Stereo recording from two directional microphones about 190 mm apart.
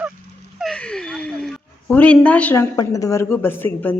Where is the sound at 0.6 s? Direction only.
5° left (ahead or behind).